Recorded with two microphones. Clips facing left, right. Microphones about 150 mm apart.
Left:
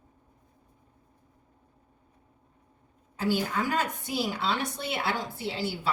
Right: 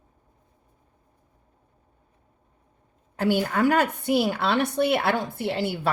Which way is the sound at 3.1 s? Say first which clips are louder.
Right 5 dB; 60° right (ahead or behind).